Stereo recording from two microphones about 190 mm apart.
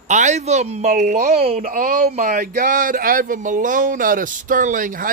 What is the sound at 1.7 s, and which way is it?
Speech, 50° right (ahead or behind).